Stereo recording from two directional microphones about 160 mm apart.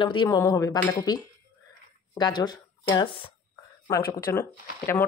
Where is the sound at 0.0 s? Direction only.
30° left (ahead or behind).